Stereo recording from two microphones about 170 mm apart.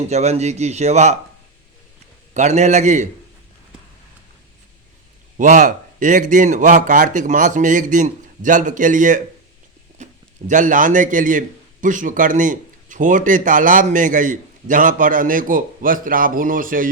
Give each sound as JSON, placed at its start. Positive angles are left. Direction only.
{"t": 0.1, "sound": "speech", "side_deg": -40}
{"t": 2.3, "sound": "a man's voice", "side_deg": -45}
{"t": 5.4, "sound": "a man's voice", "side_deg": -50}